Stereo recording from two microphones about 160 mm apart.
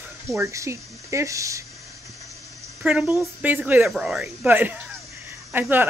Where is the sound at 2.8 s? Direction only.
5° right (ahead or behind).